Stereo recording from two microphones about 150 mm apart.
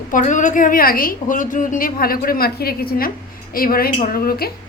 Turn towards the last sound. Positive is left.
turn(degrees=90)